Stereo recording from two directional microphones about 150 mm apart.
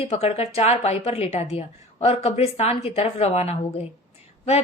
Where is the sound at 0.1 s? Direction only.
45° left (ahead or behind).